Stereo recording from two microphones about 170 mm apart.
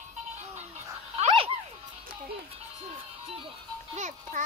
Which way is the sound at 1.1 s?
35° right (ahead or behind).